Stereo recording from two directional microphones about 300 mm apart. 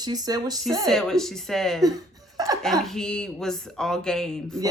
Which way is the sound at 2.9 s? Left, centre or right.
Centre.